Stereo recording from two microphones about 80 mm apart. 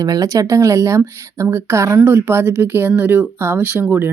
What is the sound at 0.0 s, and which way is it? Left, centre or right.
Speech, right.